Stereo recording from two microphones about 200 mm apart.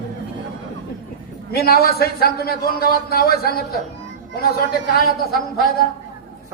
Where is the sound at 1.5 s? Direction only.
50° left (ahead or behind).